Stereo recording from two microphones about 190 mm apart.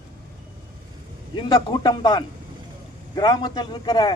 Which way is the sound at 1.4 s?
20° left (ahead or behind).